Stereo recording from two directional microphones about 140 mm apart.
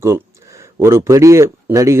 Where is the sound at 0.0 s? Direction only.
20° right (ahead or behind).